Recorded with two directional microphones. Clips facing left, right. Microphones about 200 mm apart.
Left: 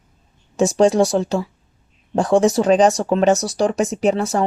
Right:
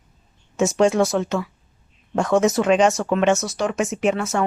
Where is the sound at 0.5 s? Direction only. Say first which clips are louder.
Left 3 dB; 35° left (ahead or behind).